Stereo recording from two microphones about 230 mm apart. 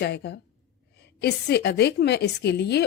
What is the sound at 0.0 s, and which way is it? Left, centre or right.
A woman's voice, left.